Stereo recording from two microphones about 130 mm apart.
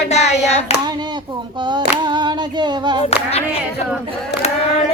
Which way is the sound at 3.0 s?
50° left (ahead or behind).